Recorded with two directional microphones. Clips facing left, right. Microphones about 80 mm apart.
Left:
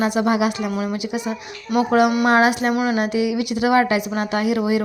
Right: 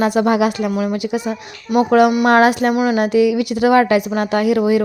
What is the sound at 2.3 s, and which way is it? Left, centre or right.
Speech, right.